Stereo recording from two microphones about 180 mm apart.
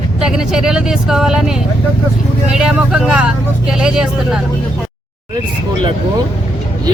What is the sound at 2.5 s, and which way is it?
Speech, 5° right (ahead or behind).